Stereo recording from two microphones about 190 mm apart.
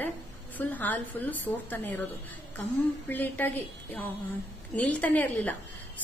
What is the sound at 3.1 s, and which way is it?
A woman's voice, 10° left (ahead or behind).